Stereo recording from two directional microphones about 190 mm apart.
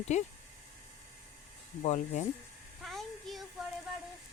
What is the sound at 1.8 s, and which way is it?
Speech, 35° left (ahead or behind).